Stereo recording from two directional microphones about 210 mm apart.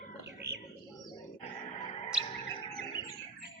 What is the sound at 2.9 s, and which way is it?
Organ, 20° left (ahead or behind).